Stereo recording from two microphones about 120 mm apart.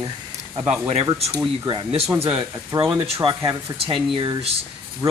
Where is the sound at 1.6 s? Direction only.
50° right (ahead or behind).